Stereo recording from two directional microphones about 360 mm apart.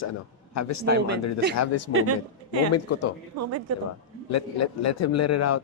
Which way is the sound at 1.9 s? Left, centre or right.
Right.